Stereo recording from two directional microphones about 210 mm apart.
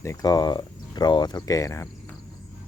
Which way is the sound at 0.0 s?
15° left (ahead or behind).